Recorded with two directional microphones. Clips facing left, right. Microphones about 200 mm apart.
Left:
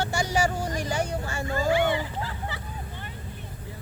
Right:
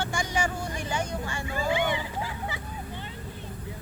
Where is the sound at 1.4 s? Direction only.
15° right (ahead or behind).